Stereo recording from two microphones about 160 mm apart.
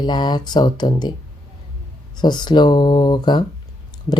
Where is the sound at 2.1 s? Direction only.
25° left (ahead or behind).